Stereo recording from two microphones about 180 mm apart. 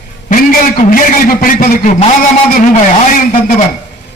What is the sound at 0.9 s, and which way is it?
A man's voice, 50° left (ahead or behind).